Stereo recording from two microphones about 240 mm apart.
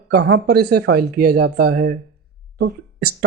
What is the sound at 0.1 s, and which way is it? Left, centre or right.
Speech, right.